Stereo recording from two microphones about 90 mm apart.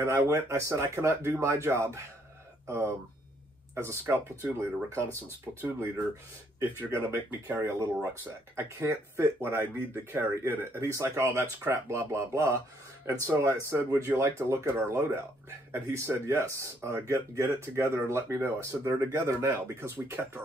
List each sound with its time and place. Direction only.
0.0 s speech: 25° right (ahead or behind)